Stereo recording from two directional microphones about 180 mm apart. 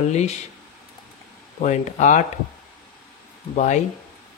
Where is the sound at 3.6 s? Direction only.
40° left (ahead or behind).